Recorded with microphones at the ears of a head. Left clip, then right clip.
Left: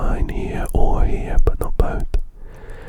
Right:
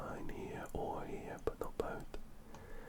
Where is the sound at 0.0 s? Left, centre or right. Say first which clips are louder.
Left 18 dB; left.